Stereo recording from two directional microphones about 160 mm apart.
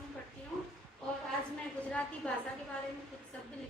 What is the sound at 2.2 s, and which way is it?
Speech, 5° left (ahead or behind).